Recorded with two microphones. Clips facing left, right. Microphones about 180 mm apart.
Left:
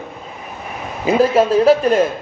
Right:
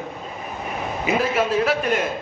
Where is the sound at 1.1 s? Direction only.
35° left (ahead or behind).